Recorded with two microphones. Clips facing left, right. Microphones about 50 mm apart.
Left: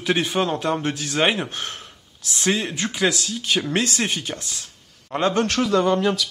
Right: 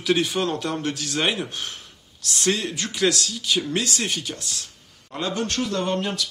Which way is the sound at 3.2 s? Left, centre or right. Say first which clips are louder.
Left 1 dB; left.